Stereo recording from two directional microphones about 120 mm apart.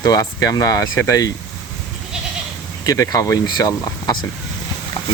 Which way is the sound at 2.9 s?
30° left (ahead or behind).